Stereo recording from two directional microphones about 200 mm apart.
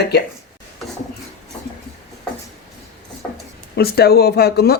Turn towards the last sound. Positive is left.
turn(degrees=55)  # may be behind; listen again after turning